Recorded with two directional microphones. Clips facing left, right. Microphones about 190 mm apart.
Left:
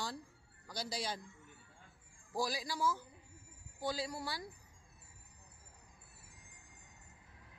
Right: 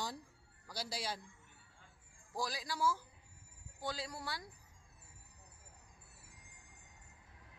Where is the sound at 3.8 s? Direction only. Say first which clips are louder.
Left 4 dB; centre (ahead or behind).